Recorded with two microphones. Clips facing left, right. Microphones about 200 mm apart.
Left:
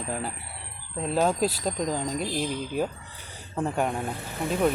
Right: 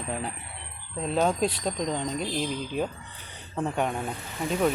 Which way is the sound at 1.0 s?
5° left (ahead or behind).